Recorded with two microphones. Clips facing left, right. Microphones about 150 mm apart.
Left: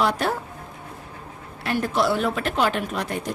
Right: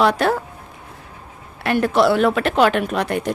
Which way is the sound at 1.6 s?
65° right (ahead or behind).